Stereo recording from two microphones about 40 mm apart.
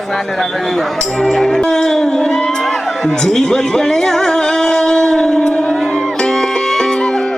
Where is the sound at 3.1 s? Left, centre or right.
Centre.